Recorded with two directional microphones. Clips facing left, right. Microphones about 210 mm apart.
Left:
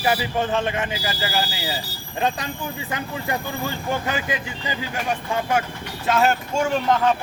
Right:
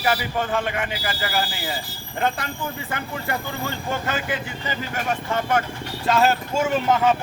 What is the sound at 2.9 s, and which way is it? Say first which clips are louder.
A man's voice: left 3 dB; 15° left (ahead or behind).